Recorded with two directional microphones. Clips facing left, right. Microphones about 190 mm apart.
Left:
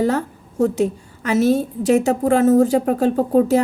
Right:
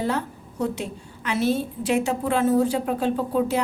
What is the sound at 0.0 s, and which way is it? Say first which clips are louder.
A woman's voice: left 7 dB; 45° left (ahead or behind).